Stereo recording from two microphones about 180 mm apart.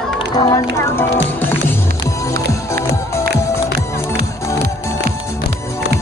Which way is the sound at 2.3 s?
15° left (ahead or behind).